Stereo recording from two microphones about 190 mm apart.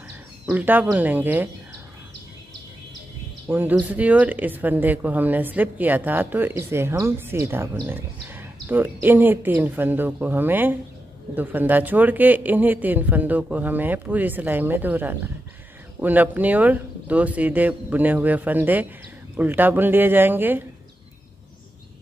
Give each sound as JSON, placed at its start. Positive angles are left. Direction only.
{"t": 0.5, "sound": "speech", "side_deg": -10}
{"t": 3.4, "sound": "speech", "side_deg": -10}